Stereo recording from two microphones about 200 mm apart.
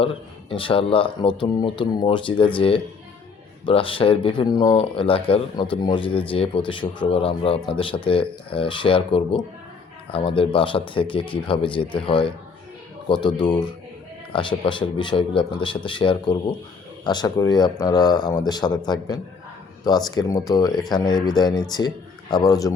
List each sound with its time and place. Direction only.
0.0 s speech: 25° left (ahead or behind)